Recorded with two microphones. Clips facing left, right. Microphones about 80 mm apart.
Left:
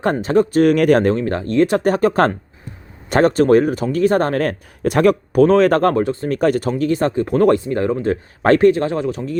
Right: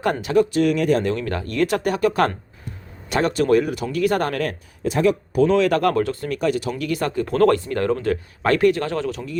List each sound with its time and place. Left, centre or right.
0.0 s speech: left
1.1 s speech: left
4.8 s speech: left
6.2 s speech: left; by 8.1 s centre
8.1 s speech: left